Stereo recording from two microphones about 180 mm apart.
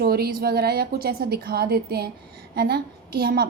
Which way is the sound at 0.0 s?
55° right (ahead or behind).